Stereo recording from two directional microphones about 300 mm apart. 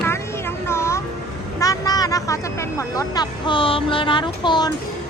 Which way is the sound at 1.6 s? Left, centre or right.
Centre.